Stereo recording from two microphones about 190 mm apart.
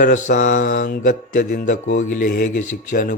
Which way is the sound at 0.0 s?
40° left (ahead or behind).